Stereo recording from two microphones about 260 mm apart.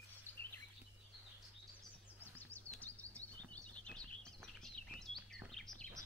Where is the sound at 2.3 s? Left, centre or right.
Centre.